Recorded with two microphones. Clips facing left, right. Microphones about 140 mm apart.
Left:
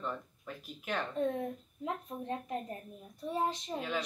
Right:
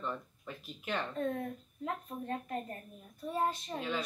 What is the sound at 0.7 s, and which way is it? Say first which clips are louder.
Speech: even; centre (ahead or behind).